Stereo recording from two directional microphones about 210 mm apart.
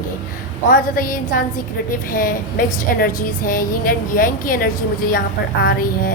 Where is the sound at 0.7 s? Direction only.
40° left (ahead or behind).